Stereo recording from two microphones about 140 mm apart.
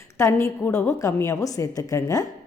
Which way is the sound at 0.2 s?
20° left (ahead or behind).